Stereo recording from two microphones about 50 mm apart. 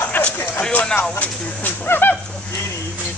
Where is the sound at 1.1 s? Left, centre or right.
Left.